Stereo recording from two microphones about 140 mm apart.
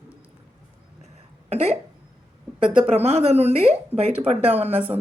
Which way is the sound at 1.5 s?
50° right (ahead or behind).